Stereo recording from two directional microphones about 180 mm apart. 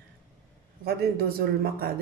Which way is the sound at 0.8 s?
60° right (ahead or behind).